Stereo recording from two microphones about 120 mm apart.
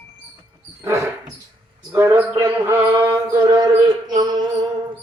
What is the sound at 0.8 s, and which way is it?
Dog, 25° right (ahead or behind).